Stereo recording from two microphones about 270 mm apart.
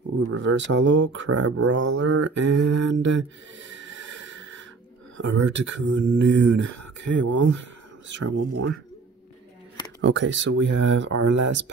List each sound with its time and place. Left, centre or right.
0.3 s speech: right
2.3 s a sound: right
2.8 s a sound: right
5.1 s speech: right
6.6 s speech: right
7.2 s speech: right
10.0 s speech: right
11.1 s speech: right
11.3 s speech: right